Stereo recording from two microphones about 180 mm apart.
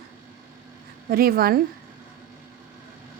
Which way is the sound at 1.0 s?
55° right (ahead or behind).